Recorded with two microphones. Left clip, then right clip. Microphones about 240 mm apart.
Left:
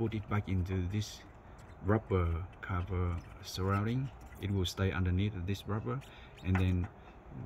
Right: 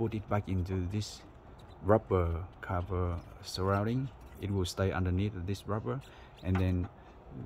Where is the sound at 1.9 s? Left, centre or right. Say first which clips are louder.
Right 5 dB; centre.